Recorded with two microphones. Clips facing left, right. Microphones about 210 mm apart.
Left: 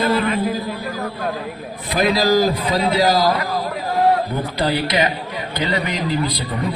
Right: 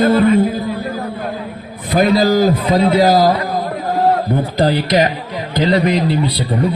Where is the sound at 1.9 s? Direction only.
50° right (ahead or behind).